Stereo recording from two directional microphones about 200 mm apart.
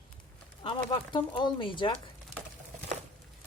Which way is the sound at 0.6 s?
25° left (ahead or behind).